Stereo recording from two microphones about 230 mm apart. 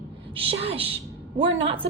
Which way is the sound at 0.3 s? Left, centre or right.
Right.